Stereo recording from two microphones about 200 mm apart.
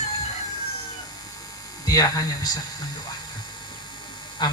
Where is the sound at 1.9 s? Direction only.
20° left (ahead or behind).